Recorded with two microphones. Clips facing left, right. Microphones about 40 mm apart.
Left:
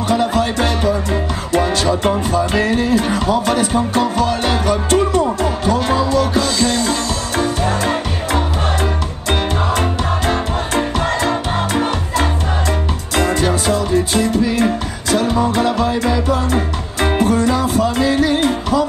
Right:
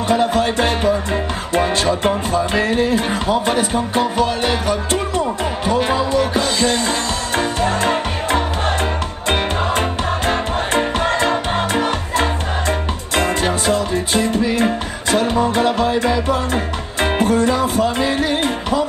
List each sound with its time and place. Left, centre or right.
0.1 s music: right